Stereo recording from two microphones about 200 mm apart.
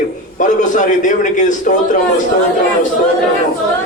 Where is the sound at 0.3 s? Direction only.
40° left (ahead or behind).